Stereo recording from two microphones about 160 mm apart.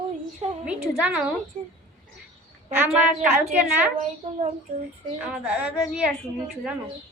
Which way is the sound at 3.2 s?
10° right (ahead or behind).